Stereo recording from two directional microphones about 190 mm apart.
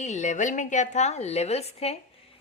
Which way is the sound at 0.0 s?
40° left (ahead or behind).